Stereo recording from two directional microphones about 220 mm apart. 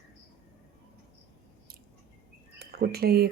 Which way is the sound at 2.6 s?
45° right (ahead or behind).